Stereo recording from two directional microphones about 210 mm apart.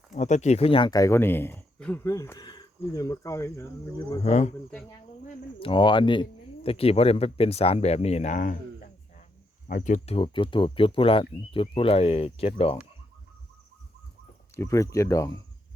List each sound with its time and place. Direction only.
0.1 s speech: 35° left (ahead or behind); by 4.2 s 15° left (ahead or behind)
4.2 s speech: 30° left (ahead or behind)
5.5 s speech: 25° left (ahead or behind)
9.6 s speech: 35° left (ahead or behind)
14.5 s speech: 15° left (ahead or behind)